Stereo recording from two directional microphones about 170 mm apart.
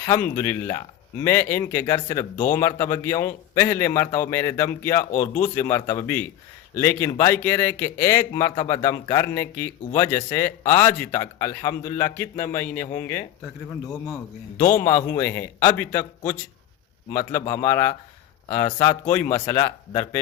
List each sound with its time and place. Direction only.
0.0 s a man's voice: 15° left (ahead or behind)
5.1 s speech: 50° left (ahead or behind)
5.5 s a man's voice: 15° left (ahead or behind)
14.6 s speech: 55° left (ahead or behind)
14.8 s a man's voice: 15° left (ahead or behind)